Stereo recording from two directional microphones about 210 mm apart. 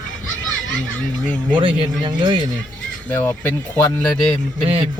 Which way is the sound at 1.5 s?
20° right (ahead or behind).